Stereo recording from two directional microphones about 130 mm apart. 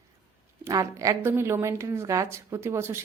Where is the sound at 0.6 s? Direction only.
25° right (ahead or behind).